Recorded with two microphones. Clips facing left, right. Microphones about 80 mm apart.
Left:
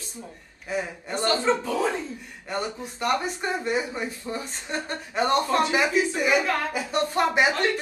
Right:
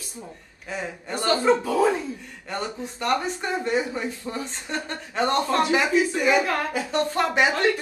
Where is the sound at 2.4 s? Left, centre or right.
Centre.